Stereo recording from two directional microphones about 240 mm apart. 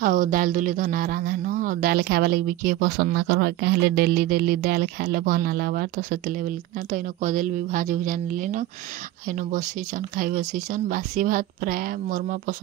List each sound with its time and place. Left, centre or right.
0.0 s speech: right